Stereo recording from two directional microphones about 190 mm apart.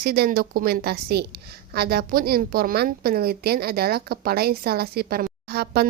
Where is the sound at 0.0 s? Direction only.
55° right (ahead or behind).